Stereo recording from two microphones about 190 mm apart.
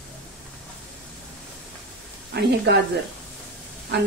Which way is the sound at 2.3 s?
60° right (ahead or behind).